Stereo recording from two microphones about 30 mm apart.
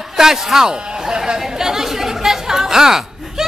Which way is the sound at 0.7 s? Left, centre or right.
Right.